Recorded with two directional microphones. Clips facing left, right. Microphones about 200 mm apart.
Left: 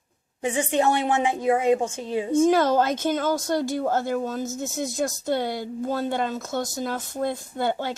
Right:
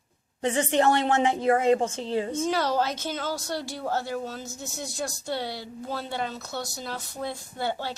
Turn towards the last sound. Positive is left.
turn(degrees=50)  # may be behind; listen again after turning